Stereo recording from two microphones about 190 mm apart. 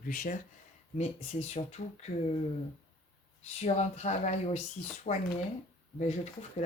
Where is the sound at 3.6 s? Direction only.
35° left (ahead or behind).